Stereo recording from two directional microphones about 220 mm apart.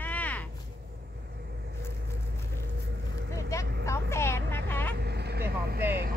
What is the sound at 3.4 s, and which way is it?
Vehicle, 15° left (ahead or behind).